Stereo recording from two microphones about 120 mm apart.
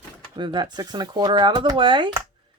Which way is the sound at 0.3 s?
40° right (ahead or behind).